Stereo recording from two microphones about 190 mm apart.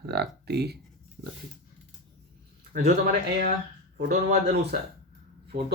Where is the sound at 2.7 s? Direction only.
55° right (ahead or behind).